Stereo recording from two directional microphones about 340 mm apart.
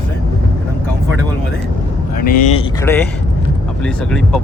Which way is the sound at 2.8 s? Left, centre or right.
Centre.